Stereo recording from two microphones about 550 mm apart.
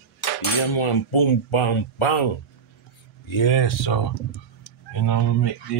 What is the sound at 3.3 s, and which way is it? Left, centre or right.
Speech, left.